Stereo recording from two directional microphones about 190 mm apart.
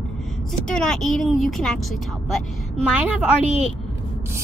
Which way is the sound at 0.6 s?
5° left (ahead or behind).